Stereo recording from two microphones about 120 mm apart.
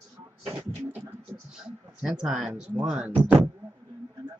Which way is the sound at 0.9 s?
20° right (ahead or behind).